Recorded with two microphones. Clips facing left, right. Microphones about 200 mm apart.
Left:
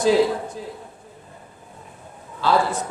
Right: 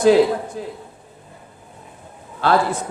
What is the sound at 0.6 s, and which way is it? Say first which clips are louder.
Speech: right 4 dB; 55° right (ahead or behind).